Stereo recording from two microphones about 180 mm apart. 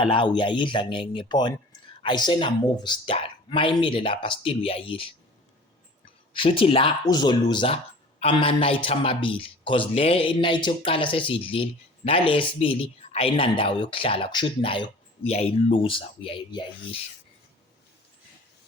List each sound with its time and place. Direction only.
0.0 s a man's voice: 30° left (ahead or behind)
6.3 s a man's voice: 30° left (ahead or behind)